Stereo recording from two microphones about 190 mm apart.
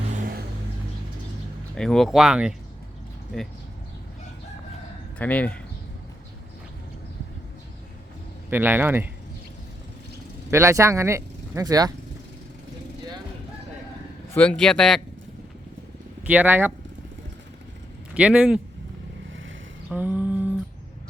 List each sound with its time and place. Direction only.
0.1 s vehicle: 45° right (ahead or behind)
1.7 s speech: 5° left (ahead or behind)
5.1 s speech: 5° left (ahead or behind)
8.4 s a man's voice: 10° right (ahead or behind)
10.5 s speech: 15° right (ahead or behind)
14.3 s speech: 5° left (ahead or behind)
16.2 s a man's voice: 10° right (ahead or behind)
18.1 s a man's voice: 5° right (ahead or behind)
19.9 s humming: 10° right (ahead or behind)